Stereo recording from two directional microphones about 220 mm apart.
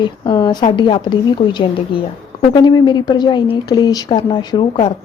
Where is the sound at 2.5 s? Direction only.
20° left (ahead or behind).